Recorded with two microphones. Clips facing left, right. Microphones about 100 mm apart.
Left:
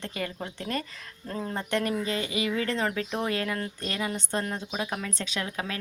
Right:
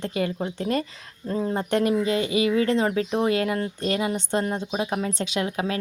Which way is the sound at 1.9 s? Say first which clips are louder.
Right 7 dB; 25° right (ahead or behind).